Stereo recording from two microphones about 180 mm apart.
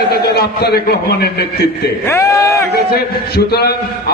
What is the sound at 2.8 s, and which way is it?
Speech, 60° left (ahead or behind).